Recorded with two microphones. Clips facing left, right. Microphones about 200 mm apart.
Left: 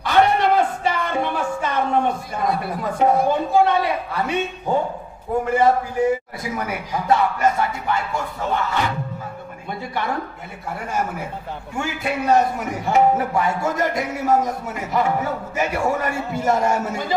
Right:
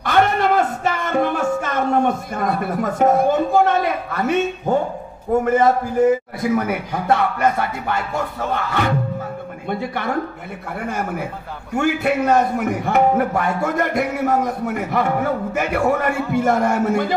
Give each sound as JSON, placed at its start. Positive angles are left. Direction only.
{"t": 0.0, "sound": "a sound", "side_deg": -50}
{"t": 2.3, "sound": "speech", "side_deg": -50}
{"t": 5.4, "sound": "a man's voice", "side_deg": -40}
{"t": 6.4, "sound": "a man's voice", "side_deg": -55}
{"t": 11.8, "sound": "a man's voice", "side_deg": -55}